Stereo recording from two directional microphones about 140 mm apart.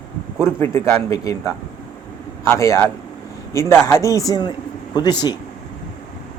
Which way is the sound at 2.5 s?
20° left (ahead or behind).